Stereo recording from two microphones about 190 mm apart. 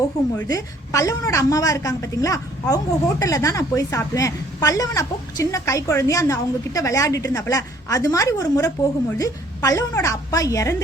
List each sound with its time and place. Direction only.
0.0 s a woman's voice: 20° left (ahead or behind)